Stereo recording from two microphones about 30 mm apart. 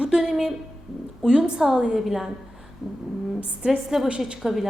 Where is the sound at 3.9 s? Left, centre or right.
Centre.